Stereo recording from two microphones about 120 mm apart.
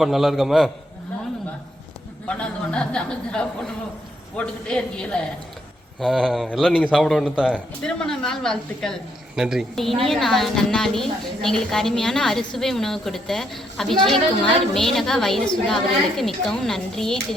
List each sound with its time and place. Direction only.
0.0 s a woman's voice: centre (ahead or behind)
2.2 s a man's voice: 10° left (ahead or behind)